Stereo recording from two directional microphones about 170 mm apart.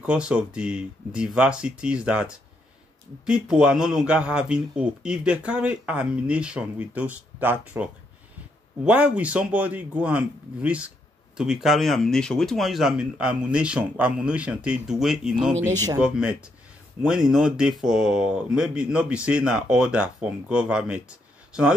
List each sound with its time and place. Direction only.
0.0 s speech: 5° right (ahead or behind)